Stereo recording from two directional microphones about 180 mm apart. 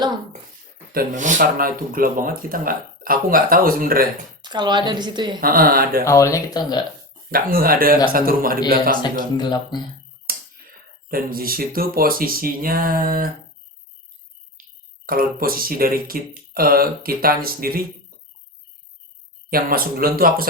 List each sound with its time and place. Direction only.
0.9 s speech: 45° right (ahead or behind)
4.4 s a woman's voice: 25° right (ahead or behind)
5.4 s speech: 55° right (ahead or behind)
6.1 s speech: 15° left (ahead or behind)
7.3 s speech: 55° right (ahead or behind)
9.4 s speech: 25° left (ahead or behind)
10.3 s a sound: 55° right (ahead or behind)
11.1 s speech: 55° right (ahead or behind)
14.6 s speech: 55° right (ahead or behind)
19.5 s speech: 55° right (ahead or behind)